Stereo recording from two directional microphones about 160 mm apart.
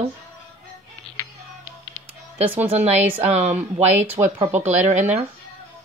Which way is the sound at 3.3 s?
45° right (ahead or behind).